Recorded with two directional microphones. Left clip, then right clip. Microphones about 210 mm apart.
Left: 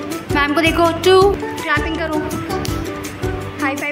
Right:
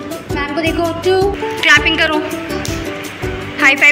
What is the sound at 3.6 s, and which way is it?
Speech, centre (ahead or behind).